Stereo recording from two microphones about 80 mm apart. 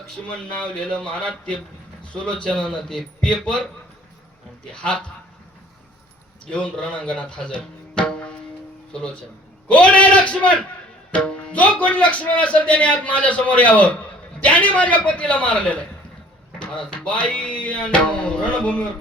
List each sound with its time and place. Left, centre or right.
0.3 s speech: centre
4.7 s speech: centre
6.4 s speech: centre
9.6 s a man's voice: centre